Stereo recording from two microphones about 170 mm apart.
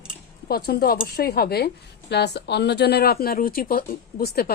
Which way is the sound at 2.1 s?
80° left.